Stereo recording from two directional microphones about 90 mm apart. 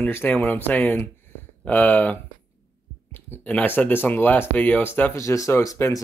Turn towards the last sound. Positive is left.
turn(degrees=40)  # may be behind; listen again after turning